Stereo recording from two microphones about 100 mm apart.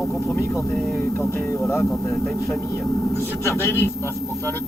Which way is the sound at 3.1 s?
25° left (ahead or behind).